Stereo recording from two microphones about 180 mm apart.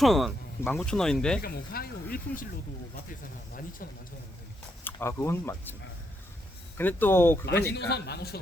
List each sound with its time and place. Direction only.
0.0 s speech: centre (ahead or behind)
1.4 s speech: 55° left (ahead or behind)
4.8 s speech: 10° left (ahead or behind)
6.7 s speech: 10° left (ahead or behind)
7.4 s speech: 65° left (ahead or behind)